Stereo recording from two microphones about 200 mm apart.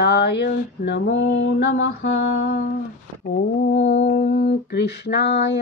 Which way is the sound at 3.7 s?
65° left (ahead or behind).